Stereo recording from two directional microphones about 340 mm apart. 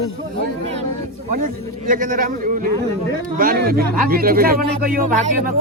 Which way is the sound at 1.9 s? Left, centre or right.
Right.